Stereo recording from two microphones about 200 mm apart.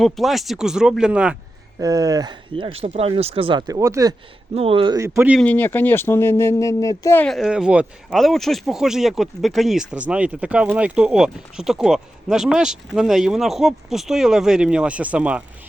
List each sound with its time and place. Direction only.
0.0 s speech: centre (ahead or behind)
1.8 s speech: 15° right (ahead or behind)
4.5 s speech: 30° right (ahead or behind); by 5.4 s 10° right (ahead or behind)
5.4 s speech: 10° left (ahead or behind)